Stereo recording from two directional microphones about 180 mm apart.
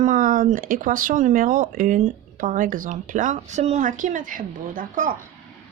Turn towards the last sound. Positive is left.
turn(degrees=-50)  # may be behind; listen again after turning